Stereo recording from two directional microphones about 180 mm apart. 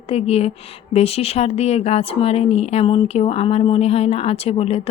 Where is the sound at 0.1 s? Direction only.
35° left (ahead or behind).